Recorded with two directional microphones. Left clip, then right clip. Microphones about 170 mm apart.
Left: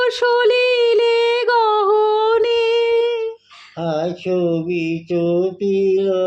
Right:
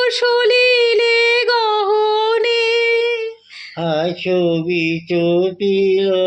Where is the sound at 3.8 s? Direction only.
10° left (ahead or behind).